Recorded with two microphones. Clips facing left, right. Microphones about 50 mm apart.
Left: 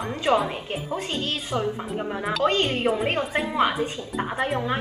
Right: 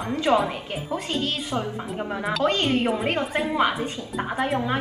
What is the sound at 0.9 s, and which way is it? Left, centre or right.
Speech, left.